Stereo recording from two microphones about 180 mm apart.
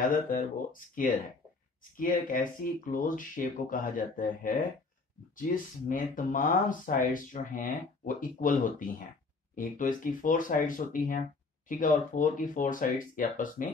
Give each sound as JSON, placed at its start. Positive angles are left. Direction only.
{"t": 0.0, "sound": "speech", "side_deg": 50}